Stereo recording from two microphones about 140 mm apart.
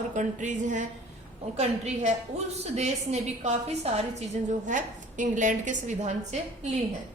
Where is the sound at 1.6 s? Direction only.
50° right (ahead or behind).